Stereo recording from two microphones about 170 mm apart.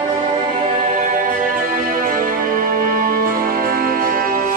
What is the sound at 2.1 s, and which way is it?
Music, 55° right (ahead or behind).